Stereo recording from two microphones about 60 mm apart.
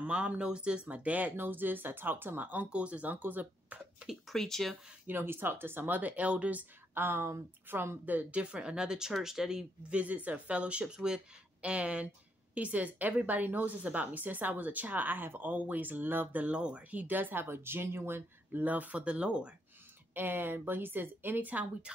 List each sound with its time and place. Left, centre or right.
0.0 s a woman's voice: right
4.3 s speech: centre
5.0 s speech: right
6.9 s speech: right
8.1 s speech: right
9.9 s a woman's voice: right
16.4 s speech: right
18.5 s a woman's voice: right
20.2 s speech: right